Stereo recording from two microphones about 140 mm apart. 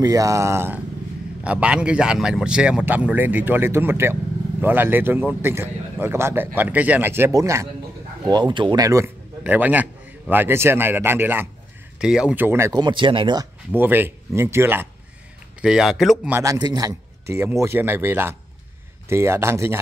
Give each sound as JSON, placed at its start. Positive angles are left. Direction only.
{"t": 0.0, "sound": "speech", "side_deg": -25}
{"t": 8.3, "sound": "speech", "side_deg": -30}
{"t": 9.4, "sound": "speech", "side_deg": -10}
{"t": 12.7, "sound": "speech", "side_deg": -35}
{"t": 13.7, "sound": "speech", "side_deg": -15}
{"t": 15.6, "sound": "speech", "side_deg": -5}
{"t": 16.3, "sound": "speech", "side_deg": -15}
{"t": 16.5, "sound": "speech", "side_deg": -30}